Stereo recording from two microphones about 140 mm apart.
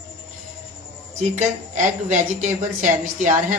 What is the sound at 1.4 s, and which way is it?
A woman's voice, 60° right (ahead or behind).